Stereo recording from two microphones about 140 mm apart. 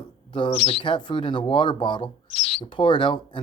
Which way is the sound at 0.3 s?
35° left (ahead or behind).